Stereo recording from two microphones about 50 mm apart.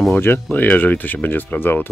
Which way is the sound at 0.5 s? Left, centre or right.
Left.